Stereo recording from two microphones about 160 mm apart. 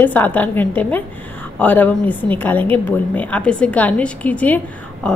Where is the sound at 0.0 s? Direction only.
10° left (ahead or behind).